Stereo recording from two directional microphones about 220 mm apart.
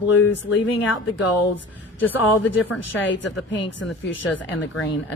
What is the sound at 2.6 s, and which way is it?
A woman's voice, 75° left (ahead or behind).